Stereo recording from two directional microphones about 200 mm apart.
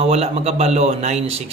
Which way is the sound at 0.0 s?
30° right (ahead or behind).